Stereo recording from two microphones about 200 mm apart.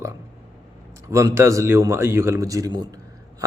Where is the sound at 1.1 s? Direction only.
15° right (ahead or behind).